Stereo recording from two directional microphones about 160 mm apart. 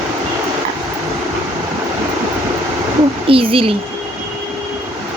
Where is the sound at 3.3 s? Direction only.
35° right (ahead or behind).